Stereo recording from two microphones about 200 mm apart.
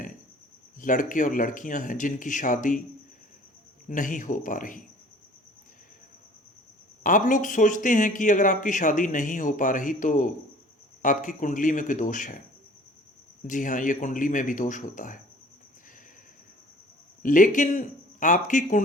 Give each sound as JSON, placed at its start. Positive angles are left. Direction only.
{"t": 0.8, "sound": "speech", "side_deg": 40}
{"t": 3.8, "sound": "speech", "side_deg": 40}
{"t": 7.0, "sound": "speech", "side_deg": 40}
{"t": 13.5, "sound": "speech", "side_deg": 40}
{"t": 17.2, "sound": "speech", "side_deg": 40}